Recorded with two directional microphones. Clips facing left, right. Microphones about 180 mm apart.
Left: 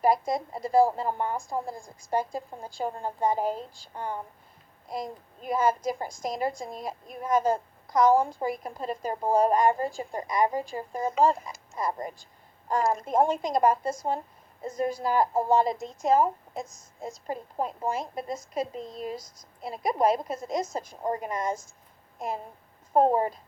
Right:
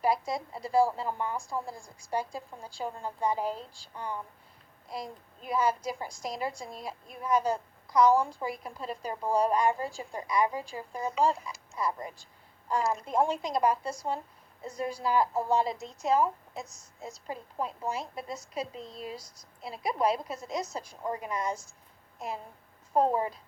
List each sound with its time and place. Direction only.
0.0 s a woman's voice: 50° left (ahead or behind)
22.9 s a woman's voice: 45° left (ahead or behind)